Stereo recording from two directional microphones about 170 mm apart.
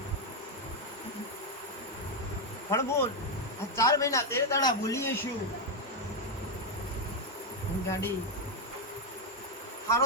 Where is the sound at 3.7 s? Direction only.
20° left (ahead or behind).